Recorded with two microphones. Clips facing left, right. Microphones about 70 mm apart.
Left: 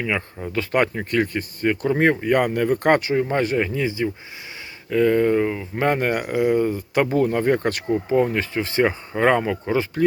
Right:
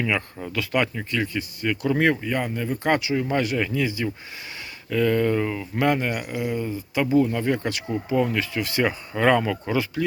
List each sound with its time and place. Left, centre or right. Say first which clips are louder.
0.5 s speech: left 3 dB; left
2.2 s speech: left 7 dB; left; by 5.8 s centre
6.0 s speech: left 6 dB; left